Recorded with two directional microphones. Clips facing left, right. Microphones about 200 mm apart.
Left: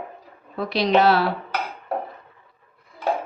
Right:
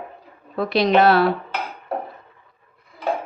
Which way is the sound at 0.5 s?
55° right (ahead or behind).